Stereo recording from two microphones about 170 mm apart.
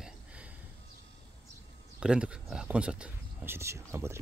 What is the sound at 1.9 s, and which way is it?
Speech, 5° right (ahead or behind).